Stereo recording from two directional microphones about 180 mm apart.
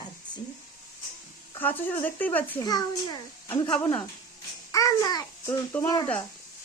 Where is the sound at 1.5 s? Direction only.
10° left (ahead or behind).